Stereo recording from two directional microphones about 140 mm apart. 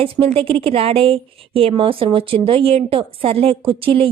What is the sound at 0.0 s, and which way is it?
A woman's voice, 40° right (ahead or behind).